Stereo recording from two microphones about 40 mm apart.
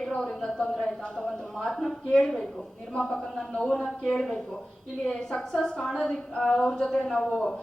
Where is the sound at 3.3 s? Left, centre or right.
Centre.